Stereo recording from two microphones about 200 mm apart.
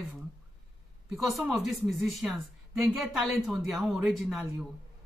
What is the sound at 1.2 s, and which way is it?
A woman's voice, centre (ahead or behind).